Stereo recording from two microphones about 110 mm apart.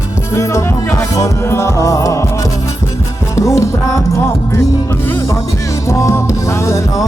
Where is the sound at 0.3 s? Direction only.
25° left (ahead or behind).